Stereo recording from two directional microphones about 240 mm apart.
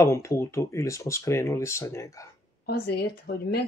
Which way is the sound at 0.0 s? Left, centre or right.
Centre.